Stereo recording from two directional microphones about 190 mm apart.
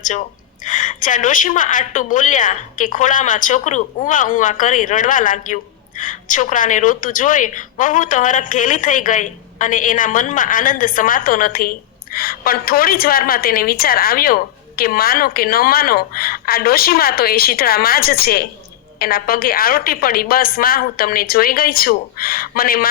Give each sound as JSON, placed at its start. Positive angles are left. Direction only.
{"t": 0.6, "sound": "a woman's voice", "side_deg": 40}